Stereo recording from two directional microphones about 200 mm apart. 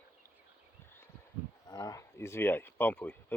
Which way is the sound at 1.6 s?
20° left (ahead or behind).